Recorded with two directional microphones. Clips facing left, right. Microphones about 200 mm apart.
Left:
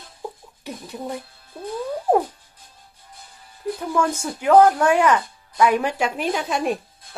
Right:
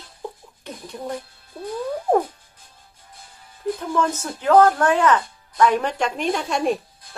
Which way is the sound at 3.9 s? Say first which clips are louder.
Left 2 dB; 10° left (ahead or behind).